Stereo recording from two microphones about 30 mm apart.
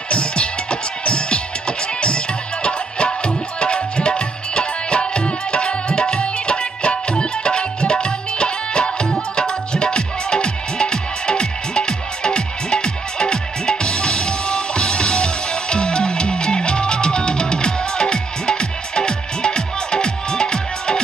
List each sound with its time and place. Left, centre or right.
0.1 s music: left
3.5 s tabla: left
6.2 s music: left